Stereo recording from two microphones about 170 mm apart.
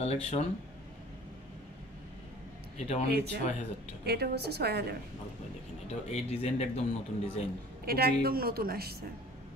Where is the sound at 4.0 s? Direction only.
70° right (ahead or behind).